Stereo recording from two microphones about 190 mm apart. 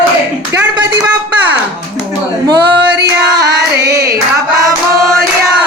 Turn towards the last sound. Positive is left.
turn(degrees=-15)  # may be behind; listen again after turning